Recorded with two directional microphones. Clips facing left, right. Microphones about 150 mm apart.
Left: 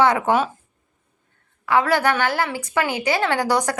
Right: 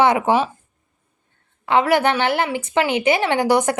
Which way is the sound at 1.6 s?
20° right (ahead or behind).